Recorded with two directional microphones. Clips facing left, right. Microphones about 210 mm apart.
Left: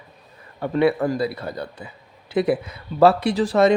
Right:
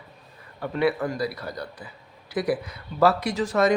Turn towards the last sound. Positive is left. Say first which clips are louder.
# left 5 dB
turn(degrees=30)  # may be behind; listen again after turning